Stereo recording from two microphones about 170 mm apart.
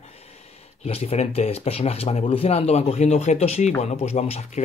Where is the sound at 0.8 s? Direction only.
35° left (ahead or behind).